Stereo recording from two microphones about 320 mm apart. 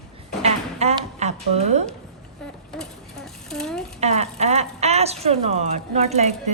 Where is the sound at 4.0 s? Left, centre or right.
Centre.